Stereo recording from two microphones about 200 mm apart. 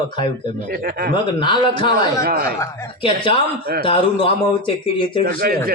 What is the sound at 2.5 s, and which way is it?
Speech, 15° left (ahead or behind).